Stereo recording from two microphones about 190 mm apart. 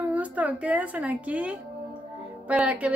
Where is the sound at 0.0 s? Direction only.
10° right (ahead or behind).